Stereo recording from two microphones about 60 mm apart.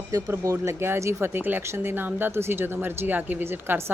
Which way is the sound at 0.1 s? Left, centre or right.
Right.